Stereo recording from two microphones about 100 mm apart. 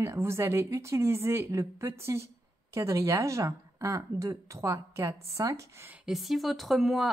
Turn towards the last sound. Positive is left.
turn(degrees=0)  # may be behind; listen again after turning